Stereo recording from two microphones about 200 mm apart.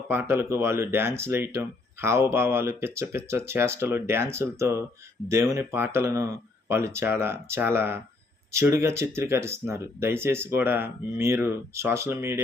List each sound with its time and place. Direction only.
0.1 s speech: 10° right (ahead or behind)